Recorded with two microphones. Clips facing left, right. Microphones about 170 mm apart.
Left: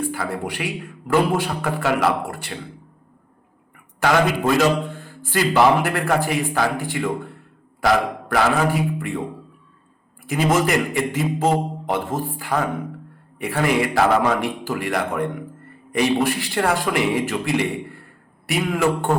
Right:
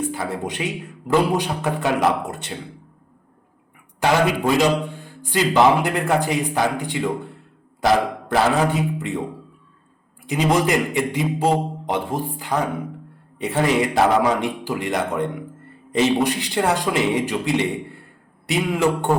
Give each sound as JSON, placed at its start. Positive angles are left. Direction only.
{"t": 0.0, "sound": "a man's voice", "side_deg": -20}
{"t": 4.0, "sound": "a man's voice", "side_deg": -15}
{"t": 10.2, "sound": "a man's voice", "side_deg": -20}